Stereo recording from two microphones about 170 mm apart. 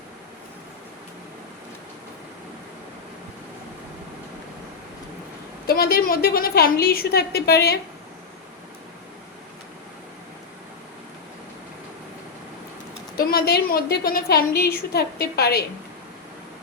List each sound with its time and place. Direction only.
5.6 s a woman's voice: 65° left (ahead or behind)
13.1 s a woman's voice: 65° left (ahead or behind)